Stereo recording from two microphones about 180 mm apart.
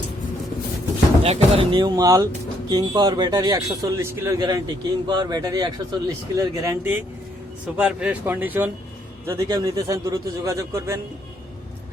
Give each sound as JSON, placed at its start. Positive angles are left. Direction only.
{"t": 1.2, "sound": "a man's voice", "side_deg": -30}